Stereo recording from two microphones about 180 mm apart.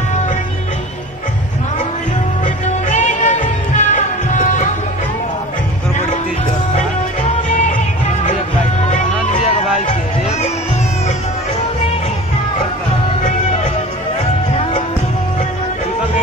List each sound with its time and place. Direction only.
2.4 s music: 45° left (ahead or behind)